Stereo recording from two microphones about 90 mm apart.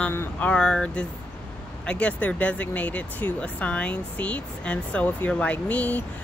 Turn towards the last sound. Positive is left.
turn(degrees=15)  # may be behind; listen again after turning